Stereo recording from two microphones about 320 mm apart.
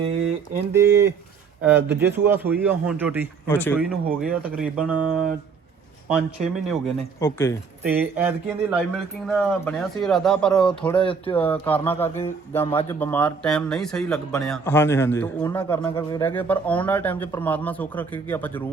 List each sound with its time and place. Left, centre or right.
1.6 s speech: centre
3.5 s speech: centre
7.9 s speech: centre
11.0 s speech: centre
11.3 s speech: centre